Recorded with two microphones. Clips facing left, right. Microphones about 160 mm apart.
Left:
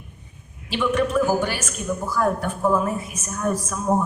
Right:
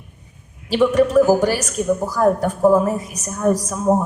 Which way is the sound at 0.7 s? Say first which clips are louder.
Right 7 dB; 40° right (ahead or behind).